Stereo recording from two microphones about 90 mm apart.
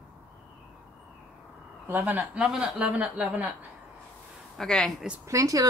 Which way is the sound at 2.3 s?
10° right (ahead or behind).